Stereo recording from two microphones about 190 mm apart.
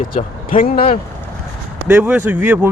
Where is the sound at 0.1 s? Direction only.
45° left (ahead or behind).